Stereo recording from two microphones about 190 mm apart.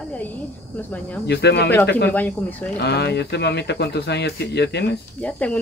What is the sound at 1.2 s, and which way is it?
Speech, 60° left (ahead or behind).